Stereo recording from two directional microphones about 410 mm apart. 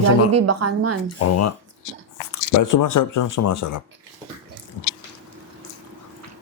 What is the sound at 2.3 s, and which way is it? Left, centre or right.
Speech, left.